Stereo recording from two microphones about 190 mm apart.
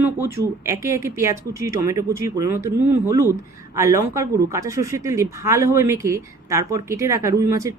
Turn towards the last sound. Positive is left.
turn(degrees=-15)  # may be behind; listen again after turning